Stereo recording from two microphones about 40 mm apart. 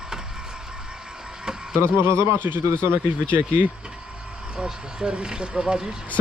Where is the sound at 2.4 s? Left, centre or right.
Right.